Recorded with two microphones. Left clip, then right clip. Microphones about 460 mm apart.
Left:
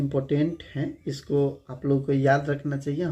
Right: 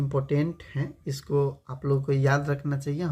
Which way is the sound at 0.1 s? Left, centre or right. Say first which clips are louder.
Even; right.